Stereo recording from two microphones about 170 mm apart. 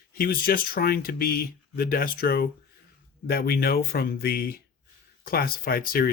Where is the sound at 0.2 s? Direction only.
60° left (ahead or behind).